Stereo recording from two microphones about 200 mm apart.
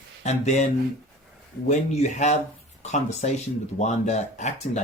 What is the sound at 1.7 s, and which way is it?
Speech, 35° left (ahead or behind).